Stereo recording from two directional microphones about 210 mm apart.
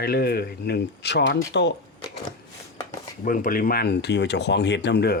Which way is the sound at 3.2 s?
40° left (ahead or behind).